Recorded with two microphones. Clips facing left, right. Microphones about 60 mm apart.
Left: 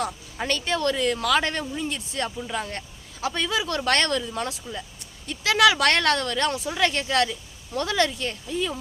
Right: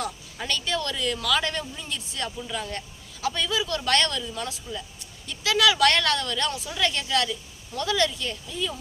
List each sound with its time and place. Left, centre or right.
0.0 s speech: left
4.7 s speech: centre
5.2 s speech: left